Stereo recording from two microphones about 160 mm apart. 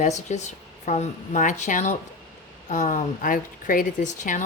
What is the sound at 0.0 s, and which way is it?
Speech, 45° left (ahead or behind).